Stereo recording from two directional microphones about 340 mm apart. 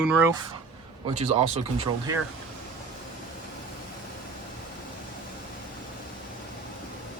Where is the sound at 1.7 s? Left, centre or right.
Centre.